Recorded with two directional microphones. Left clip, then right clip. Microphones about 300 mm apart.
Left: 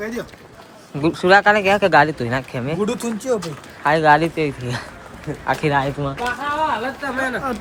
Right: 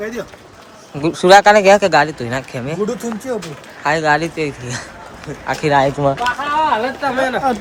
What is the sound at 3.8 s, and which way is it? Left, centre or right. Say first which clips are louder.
Speech: left 1 dB; centre.